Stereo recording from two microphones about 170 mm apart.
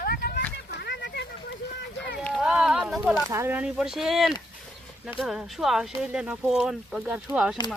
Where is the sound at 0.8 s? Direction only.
80° left.